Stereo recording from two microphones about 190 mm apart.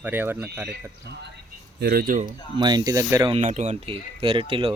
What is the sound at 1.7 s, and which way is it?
Speech, 50° right (ahead or behind).